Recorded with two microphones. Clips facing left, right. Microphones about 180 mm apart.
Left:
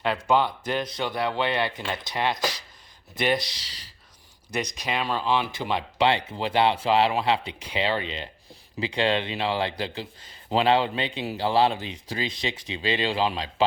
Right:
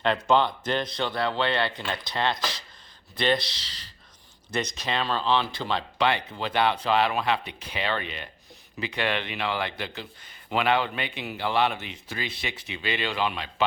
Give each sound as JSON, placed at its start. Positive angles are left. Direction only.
{"t": 0.0, "sound": "a man's voice", "side_deg": 10}